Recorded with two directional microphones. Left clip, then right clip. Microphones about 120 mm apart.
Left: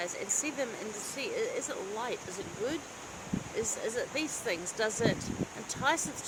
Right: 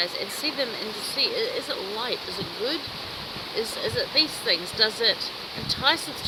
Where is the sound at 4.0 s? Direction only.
30° left (ahead or behind).